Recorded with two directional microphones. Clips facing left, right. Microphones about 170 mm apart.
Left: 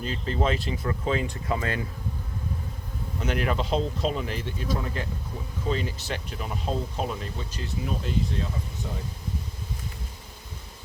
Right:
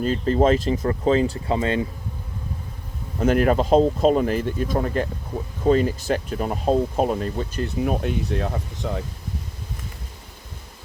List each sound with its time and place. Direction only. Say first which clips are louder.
0.0 s speech: right 9 dB; 45° right (ahead or behind); by 1.9 s 25° right (ahead or behind)
3.2 s speech: right 9 dB; 45° right (ahead or behind); by 9.0 s 70° right (ahead or behind)